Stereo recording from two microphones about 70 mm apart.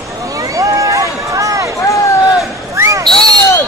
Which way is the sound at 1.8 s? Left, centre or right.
Left.